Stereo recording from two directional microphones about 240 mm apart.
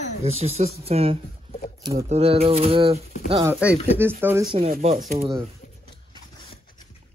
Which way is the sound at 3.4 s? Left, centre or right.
Centre.